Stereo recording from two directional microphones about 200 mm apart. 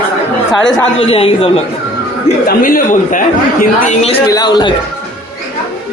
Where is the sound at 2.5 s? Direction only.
45° left (ahead or behind).